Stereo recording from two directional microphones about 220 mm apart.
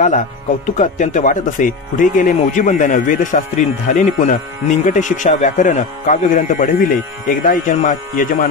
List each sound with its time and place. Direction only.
0.7 s speech: 35° left (ahead or behind)